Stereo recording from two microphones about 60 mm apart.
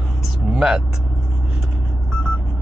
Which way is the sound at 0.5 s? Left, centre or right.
Centre.